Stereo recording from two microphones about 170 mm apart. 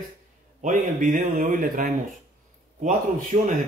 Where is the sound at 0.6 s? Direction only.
50° right (ahead or behind).